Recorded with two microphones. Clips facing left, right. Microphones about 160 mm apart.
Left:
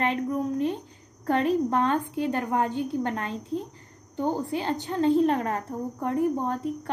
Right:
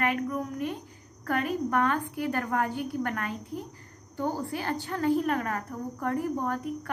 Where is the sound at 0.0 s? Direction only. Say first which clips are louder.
Left 3 dB; 25° left (ahead or behind).